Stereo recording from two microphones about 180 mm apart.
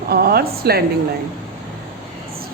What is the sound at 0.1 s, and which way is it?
Speech, 60° right (ahead or behind).